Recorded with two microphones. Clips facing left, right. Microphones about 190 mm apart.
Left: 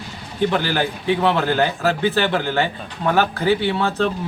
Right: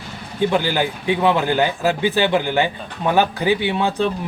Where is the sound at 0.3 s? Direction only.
15° right (ahead or behind).